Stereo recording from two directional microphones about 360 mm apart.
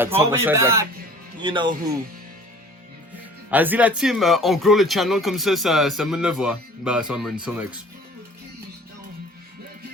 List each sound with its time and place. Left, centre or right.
0.0 s a man's voice: centre
3.5 s speech: centre